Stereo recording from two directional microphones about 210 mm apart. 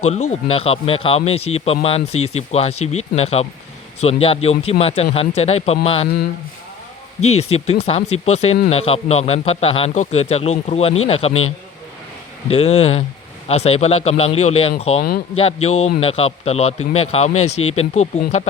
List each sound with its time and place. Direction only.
0.0 s speech: 30° left (ahead or behind)
7.3 s speech: 30° left (ahead or behind)
12.5 s speech: 30° left (ahead or behind)
17.5 s speech: 90° left
17.7 s speech: 30° left (ahead or behind)